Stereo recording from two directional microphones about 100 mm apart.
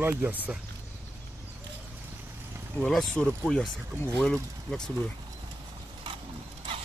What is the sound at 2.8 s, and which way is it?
Speech, 5° left (ahead or behind).